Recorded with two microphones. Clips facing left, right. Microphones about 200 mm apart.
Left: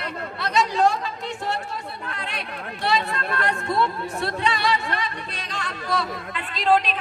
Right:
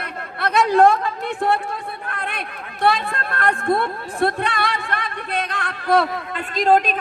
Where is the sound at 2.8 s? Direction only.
55° right (ahead or behind).